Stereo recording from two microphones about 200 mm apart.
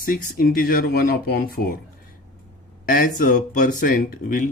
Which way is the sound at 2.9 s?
45° left (ahead or behind).